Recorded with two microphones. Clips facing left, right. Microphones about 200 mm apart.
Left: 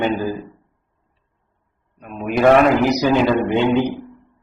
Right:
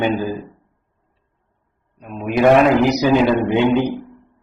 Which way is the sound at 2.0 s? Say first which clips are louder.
Right 1 dB; centre (ahead or behind).